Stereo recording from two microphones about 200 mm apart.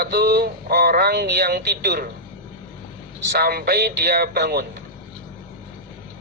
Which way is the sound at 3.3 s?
50° right (ahead or behind).